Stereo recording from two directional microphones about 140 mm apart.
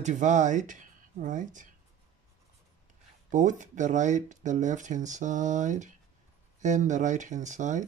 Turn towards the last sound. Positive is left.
turn(degrees=-60)  # may be behind; listen again after turning